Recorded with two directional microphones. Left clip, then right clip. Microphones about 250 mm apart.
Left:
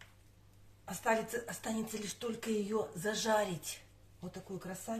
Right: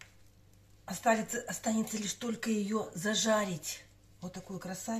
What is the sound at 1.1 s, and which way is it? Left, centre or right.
Speech, left.